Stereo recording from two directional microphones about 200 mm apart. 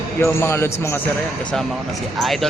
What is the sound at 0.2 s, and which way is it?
Speech, 10° left (ahead or behind).